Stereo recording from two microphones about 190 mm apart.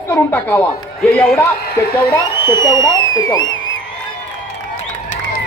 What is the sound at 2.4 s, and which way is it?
Speech, 20° left (ahead or behind).